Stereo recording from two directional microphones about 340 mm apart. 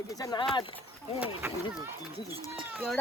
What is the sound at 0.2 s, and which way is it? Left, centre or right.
Speech, centre.